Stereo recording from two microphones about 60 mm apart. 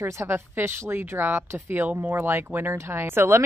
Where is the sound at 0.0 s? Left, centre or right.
Right.